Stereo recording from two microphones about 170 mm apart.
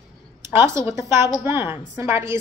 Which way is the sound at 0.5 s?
15° right (ahead or behind).